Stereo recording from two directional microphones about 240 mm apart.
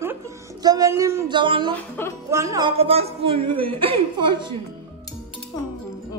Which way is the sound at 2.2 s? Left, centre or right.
Centre.